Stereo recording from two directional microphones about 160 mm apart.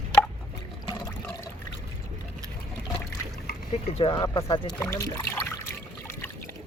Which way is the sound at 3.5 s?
70° left (ahead or behind).